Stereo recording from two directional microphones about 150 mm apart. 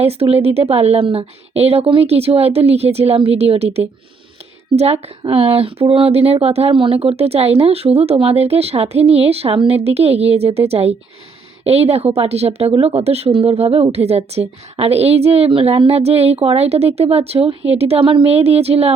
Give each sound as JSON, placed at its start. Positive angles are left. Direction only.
{"t": 0.0, "sound": "a woman's voice", "side_deg": -40}